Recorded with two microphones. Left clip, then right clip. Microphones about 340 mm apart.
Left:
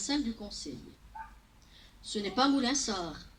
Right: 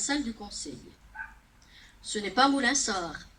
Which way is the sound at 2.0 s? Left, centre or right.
Right.